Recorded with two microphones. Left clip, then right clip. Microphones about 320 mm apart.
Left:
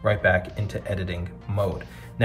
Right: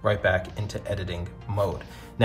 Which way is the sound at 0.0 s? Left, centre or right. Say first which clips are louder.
Left 2 dB; centre.